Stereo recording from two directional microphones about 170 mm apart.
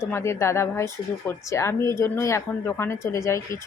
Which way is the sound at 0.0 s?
15° left (ahead or behind).